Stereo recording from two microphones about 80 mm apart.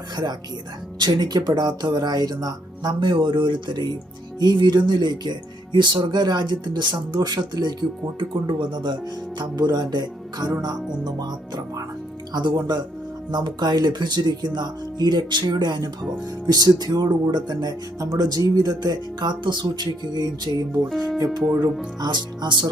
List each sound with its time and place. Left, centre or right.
0.9 s speech: right
3.0 s speech: right
12.3 s speech: right
22.0 s speech: right